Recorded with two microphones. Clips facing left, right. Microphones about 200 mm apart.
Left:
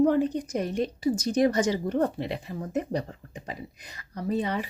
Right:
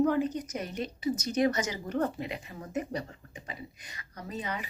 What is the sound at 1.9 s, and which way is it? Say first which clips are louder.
Speech: left 4 dB; 35° left (ahead or behind).